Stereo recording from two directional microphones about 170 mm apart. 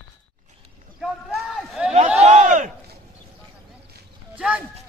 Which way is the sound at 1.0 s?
Centre (ahead or behind).